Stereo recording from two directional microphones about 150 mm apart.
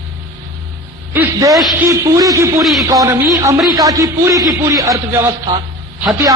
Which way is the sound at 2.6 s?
Centre (ahead or behind).